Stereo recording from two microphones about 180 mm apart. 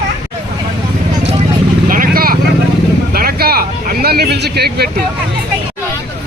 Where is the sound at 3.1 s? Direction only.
60° right (ahead or behind).